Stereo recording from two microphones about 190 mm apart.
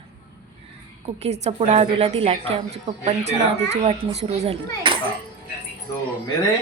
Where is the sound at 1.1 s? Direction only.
35° right (ahead or behind).